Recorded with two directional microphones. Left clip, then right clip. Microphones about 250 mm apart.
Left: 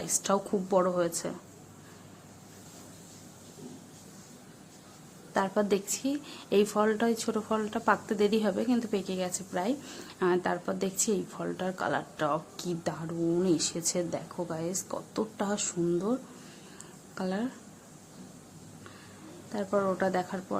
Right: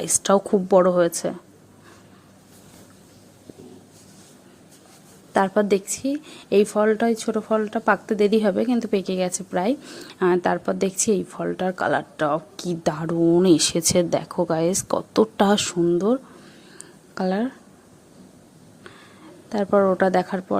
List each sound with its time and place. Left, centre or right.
0.0 s a woman's voice: right
5.3 s a woman's voice: right
17.2 s a woman's voice: right
19.5 s a woman's voice: right